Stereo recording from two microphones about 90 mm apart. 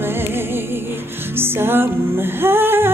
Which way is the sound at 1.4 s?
25° right (ahead or behind).